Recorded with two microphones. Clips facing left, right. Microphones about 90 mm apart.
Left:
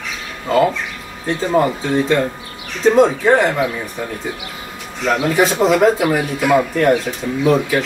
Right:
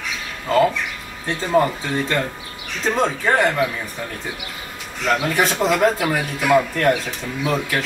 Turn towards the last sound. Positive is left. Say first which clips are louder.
# left 7 dB
turn(degrees=5)  # may be behind; listen again after turning